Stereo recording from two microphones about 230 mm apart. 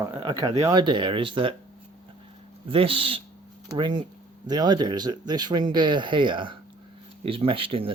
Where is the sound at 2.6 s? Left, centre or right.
Right.